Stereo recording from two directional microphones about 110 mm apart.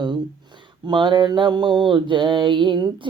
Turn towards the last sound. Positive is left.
turn(degrees=-45)  # may be behind; listen again after turning